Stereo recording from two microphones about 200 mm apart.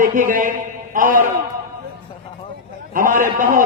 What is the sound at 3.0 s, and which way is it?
Speech, 40° right (ahead or behind).